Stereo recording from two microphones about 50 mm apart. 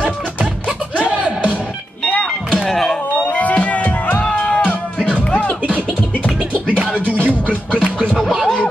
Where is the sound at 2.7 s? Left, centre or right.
Centre.